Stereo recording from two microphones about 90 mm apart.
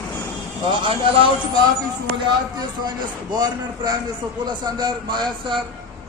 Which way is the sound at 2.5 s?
50° right (ahead or behind).